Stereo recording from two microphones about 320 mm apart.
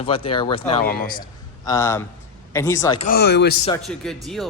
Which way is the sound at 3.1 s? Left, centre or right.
Left.